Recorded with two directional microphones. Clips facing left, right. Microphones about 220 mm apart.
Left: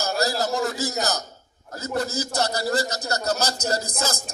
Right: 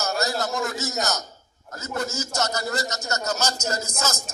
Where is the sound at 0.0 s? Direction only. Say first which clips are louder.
Left 2 dB; 35° left (ahead or behind).